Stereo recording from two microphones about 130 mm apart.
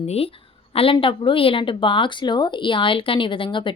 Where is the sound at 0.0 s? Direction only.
50° left (ahead or behind).